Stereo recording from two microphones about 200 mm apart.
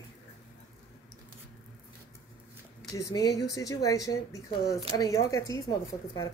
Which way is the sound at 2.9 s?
15° left (ahead or behind).